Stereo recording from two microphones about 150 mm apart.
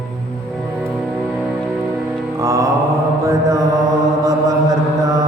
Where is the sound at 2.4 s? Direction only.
20° right (ahead or behind).